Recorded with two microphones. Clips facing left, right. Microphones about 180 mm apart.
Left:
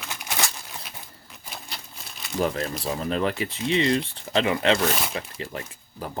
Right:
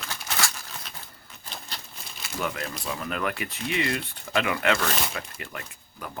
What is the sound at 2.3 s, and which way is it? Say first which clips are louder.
Speech: left 6 dB; 35° left (ahead or behind).